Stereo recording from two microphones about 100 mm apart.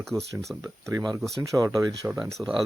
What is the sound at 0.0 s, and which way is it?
Speech, 5° left (ahead or behind).